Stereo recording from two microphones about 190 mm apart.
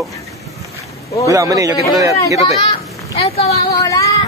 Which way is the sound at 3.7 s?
20° left (ahead or behind).